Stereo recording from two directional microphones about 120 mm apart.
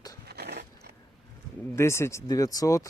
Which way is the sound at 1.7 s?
20° left (ahead or behind).